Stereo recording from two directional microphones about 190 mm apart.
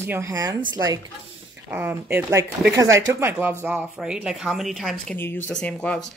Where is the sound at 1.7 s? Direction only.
10° right (ahead or behind).